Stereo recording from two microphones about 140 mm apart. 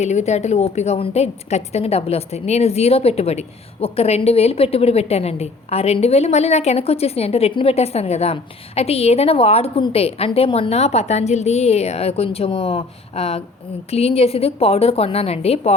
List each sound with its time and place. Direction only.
0.0 s a woman's voice: 55° left (ahead or behind)